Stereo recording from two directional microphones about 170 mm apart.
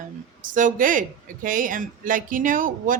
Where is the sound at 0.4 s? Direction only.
50° right (ahead or behind).